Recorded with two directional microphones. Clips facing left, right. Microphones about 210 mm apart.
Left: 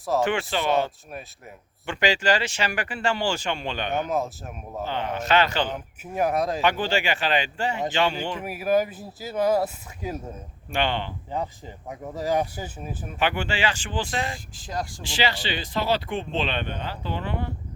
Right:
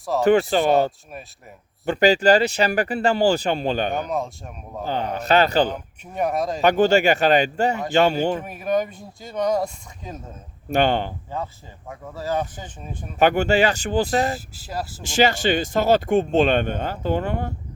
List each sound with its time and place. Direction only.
0.1 s speech: centre (ahead or behind)
0.5 s speech: 45° right (ahead or behind)
1.9 s speech: 40° right (ahead or behind)
4.1 s speech: 5° left (ahead or behind)
4.9 s speech: 40° right (ahead or behind)
5.7 s speech: centre (ahead or behind)
6.6 s speech: 45° right (ahead or behind)
8.4 s speech: 5° left (ahead or behind)
10.7 s speech: 45° right (ahead or behind)
11.3 s speech: 15° left (ahead or behind)
13.1 s speech: 40° right (ahead or behind)
14.3 s speech: 5° right (ahead or behind)
15.0 s speech: 45° right (ahead or behind)